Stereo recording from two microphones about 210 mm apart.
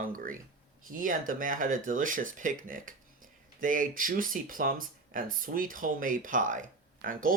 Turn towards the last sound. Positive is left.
turn(degrees=-40)  # may be behind; listen again after turning